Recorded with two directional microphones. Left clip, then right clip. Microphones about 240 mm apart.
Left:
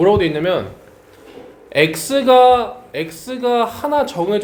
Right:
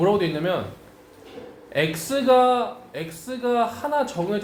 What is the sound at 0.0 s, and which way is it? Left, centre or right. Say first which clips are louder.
Speech: left 7 dB; left.